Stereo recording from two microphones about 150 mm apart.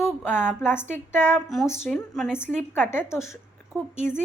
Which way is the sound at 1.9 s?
5° left (ahead or behind).